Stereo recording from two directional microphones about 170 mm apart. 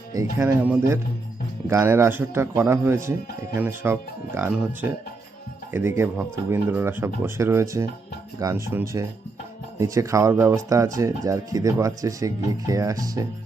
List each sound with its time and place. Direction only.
0.1 s speech: 15° right (ahead or behind)